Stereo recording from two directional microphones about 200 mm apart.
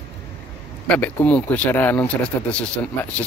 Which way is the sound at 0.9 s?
5° left (ahead or behind).